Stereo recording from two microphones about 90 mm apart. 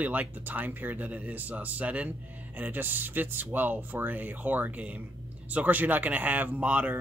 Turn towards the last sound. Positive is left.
turn(degrees=-15)  # may be behind; listen again after turning